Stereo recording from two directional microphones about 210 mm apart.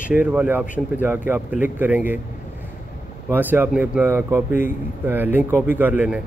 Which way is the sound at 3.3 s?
10° right (ahead or behind).